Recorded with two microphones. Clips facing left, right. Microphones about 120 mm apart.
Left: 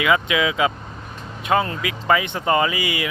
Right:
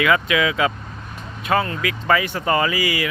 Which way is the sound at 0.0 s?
15° left (ahead or behind).